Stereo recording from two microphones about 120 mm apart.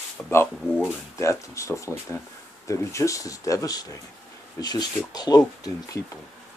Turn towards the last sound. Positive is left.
turn(degrees=35)  # may be behind; listen again after turning